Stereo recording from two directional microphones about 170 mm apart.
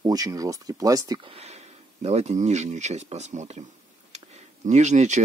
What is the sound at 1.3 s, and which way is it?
Speech, 40° right (ahead or behind).